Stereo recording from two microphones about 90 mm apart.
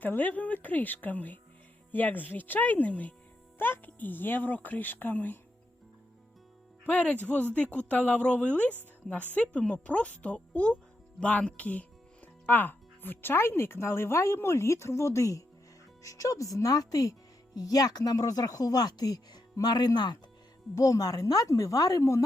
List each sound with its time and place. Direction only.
0.0 s speech: 20° left (ahead or behind)
6.8 s speech: 15° left (ahead or behind); by 20.1 s 50° left (ahead or behind)
20.7 s speech: 40° left (ahead or behind)